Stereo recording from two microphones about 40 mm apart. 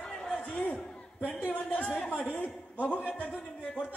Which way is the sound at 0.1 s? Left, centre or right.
Centre.